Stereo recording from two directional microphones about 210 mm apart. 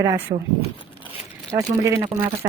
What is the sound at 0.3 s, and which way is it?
Speech, 30° right (ahead or behind).